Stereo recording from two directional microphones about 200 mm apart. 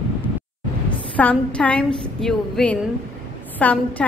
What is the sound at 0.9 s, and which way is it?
A woman's voice, 5° left (ahead or behind).